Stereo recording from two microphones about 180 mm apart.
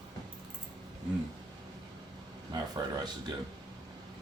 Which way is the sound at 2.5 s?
20° right (ahead or behind).